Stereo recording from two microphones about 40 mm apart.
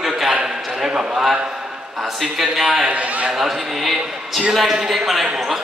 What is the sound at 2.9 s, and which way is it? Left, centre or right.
Speech, right.